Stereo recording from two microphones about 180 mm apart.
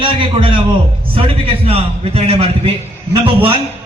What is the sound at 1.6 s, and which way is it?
Speech, 35° right (ahead or behind).